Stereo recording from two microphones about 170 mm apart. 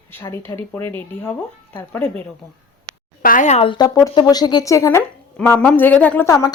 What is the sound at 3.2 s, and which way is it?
Speech, 50° left (ahead or behind).